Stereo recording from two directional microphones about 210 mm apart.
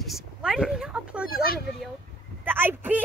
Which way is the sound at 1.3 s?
45° left (ahead or behind).